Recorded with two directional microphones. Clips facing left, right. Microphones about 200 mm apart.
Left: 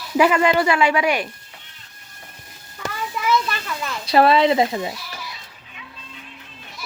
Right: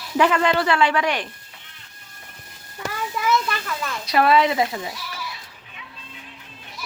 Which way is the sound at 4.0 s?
30° left (ahead or behind).